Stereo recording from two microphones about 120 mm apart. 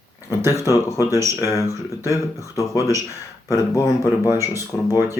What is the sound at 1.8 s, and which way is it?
Speech, 25° left (ahead or behind).